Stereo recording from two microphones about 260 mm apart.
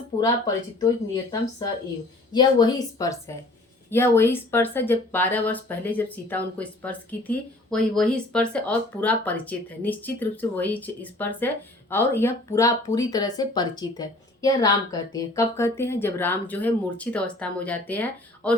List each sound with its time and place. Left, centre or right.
0.2 s speech: centre